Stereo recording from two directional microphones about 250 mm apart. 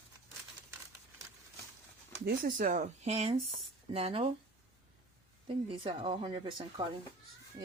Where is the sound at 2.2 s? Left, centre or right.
Right.